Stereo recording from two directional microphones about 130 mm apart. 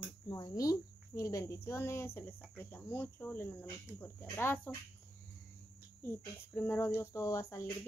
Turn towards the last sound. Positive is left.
turn(degrees=20)  # may be behind; listen again after turning